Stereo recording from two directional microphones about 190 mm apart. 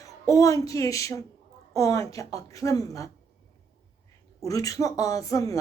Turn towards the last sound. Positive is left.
turn(degrees=20)  # may be behind; listen again after turning